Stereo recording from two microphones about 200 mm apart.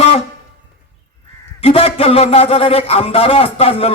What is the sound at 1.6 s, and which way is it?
A man's voice, 30° left (ahead or behind).